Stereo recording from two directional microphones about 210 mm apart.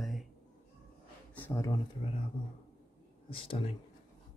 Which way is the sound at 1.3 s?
10° left (ahead or behind).